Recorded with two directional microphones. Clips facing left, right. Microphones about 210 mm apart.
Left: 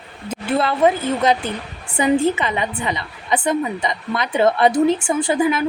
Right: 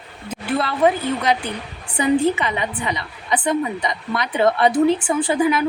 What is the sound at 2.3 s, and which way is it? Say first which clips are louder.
A woman's voice: left 1 dB; 25° left (ahead or behind).